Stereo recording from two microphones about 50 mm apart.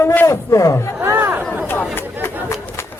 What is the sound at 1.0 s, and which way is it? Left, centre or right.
Chatter, right.